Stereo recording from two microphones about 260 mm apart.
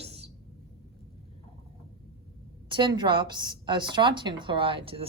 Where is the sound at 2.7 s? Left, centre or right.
Centre.